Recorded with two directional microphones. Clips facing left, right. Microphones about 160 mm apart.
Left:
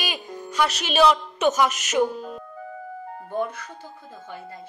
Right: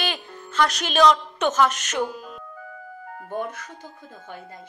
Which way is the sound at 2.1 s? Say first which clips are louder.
Left 5 dB; 25° left (ahead or behind).